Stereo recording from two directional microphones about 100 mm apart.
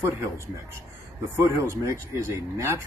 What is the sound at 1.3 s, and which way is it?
A man's voice, 30° right (ahead or behind).